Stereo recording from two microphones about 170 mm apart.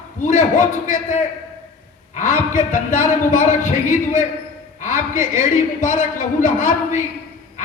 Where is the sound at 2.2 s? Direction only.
50° left (ahead or behind).